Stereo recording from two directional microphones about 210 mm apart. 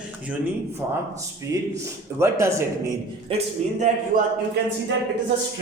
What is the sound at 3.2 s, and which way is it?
Speech, 30° right (ahead or behind).